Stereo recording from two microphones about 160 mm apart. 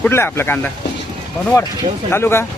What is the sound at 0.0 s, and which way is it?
Speech, 15° left (ahead or behind).